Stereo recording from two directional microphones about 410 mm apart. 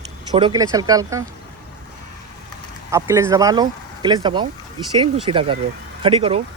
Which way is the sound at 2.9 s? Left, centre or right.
Centre.